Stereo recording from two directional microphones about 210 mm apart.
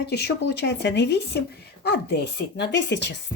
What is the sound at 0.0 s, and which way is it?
Speech, 50° left (ahead or behind).